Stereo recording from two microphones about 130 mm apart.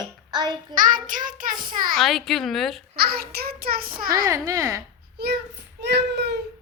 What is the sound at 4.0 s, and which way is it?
Child singing, 90° right.